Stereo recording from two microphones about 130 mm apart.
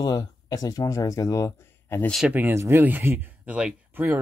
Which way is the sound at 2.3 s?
15° right (ahead or behind).